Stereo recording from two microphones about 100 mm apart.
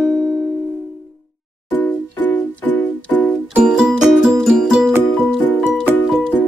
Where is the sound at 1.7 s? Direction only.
15° left (ahead or behind).